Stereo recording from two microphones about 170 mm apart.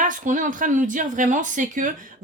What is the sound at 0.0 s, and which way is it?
Speech, 50° right (ahead or behind).